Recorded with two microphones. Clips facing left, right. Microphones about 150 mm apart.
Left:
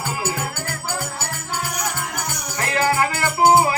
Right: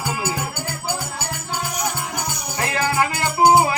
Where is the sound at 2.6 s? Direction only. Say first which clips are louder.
Left 1 dB; 15° right (ahead or behind).